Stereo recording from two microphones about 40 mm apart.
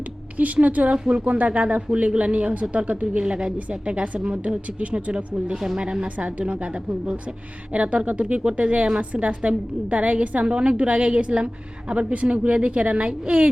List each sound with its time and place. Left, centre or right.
0.3 s speech: right
0.9 s a woman's voice: right
1.2 s a woman's voice: right
6.1 s a woman's voice: right